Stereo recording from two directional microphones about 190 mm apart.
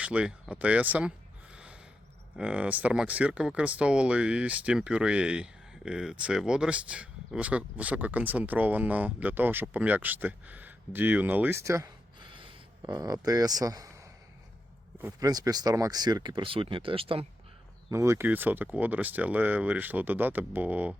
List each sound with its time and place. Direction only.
0.0 s speech: 5° right (ahead or behind)
1.5 s a sound: 5° right (ahead or behind)
2.4 s speech: 5° right (ahead or behind); by 17.2 s 30° right (ahead or behind)
17.9 s speech: 15° right (ahead or behind)